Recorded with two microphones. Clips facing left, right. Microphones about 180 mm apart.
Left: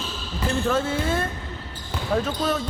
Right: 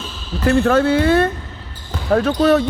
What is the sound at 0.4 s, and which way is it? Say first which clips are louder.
Speech: right 9 dB; 70° right (ahead or behind).